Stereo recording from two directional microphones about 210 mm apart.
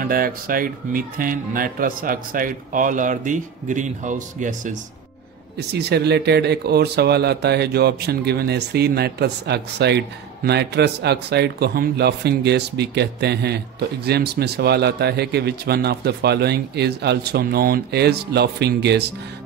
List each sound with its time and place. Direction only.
0.0 s speech: 40° right (ahead or behind)
5.6 s speech: 50° right (ahead or behind)